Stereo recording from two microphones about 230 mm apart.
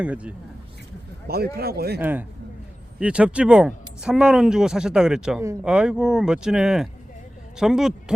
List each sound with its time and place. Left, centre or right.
0.0 s speech: centre
1.3 s a man's voice: right
2.0 s a man's voice: centre